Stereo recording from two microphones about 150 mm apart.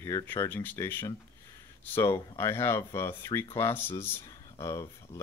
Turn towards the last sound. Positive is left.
turn(degrees=20)  # may be behind; listen again after turning